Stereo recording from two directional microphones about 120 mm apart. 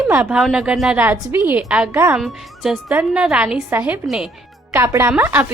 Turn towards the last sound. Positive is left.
turn(degrees=-10)  # may be behind; listen again after turning